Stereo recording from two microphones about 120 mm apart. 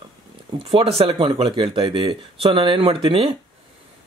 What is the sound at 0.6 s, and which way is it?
Speech, 55° right (ahead or behind).